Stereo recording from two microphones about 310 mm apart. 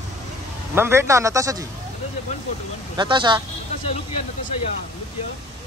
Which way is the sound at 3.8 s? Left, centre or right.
Left.